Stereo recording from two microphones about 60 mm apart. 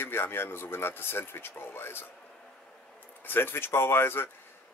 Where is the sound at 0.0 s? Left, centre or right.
Left.